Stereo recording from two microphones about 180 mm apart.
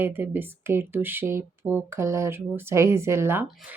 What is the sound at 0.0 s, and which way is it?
Speech, 10° right (ahead or behind).